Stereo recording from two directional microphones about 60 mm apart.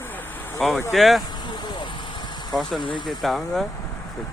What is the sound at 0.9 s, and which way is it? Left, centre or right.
Speech, centre.